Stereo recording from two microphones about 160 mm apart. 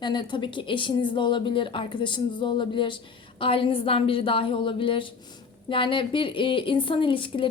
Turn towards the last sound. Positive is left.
turn(degrees=35)  # may be behind; listen again after turning